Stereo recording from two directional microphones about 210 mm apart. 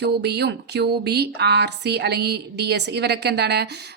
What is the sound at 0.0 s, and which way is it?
A woman's voice, 50° right (ahead or behind).